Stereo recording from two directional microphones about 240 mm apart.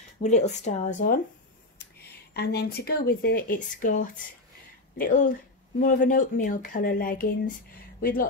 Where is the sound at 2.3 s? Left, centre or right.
Left.